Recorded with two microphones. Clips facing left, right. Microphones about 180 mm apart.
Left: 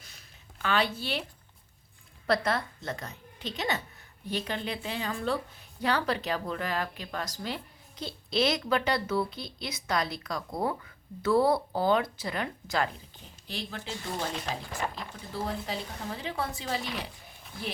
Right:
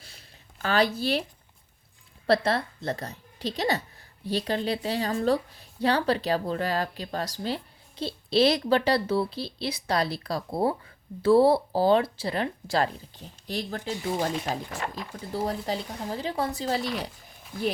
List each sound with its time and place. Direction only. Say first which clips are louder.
0.6 s a woman's voice: right 5 dB; 40° right (ahead or behind)
2.2 s a woman's voice: right 4 dB; 30° right (ahead or behind)
15.3 s a woman's voice: right 5 dB; 40° right (ahead or behind)